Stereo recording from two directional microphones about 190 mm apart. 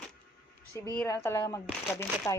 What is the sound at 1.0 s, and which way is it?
Speech, 15° left (ahead or behind).